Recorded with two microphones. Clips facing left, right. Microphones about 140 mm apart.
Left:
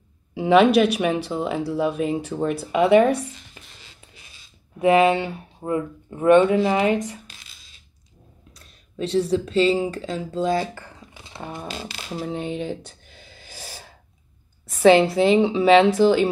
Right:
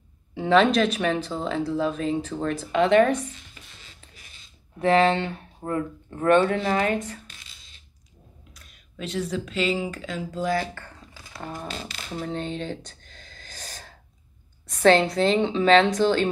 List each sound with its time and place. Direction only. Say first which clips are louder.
0.3 s speech: left 4 dB; 10° left (ahead or behind)
4.7 s speech: left 3 dB; 5° left (ahead or behind)
8.5 s speech: left 8 dB; 30° left (ahead or behind); by 11.2 s 15° left (ahead or behind)
11.7 s a sound: left 2 dB; 5° left (ahead or behind)
14.7 s speech: left 4 dB; 5° left (ahead or behind)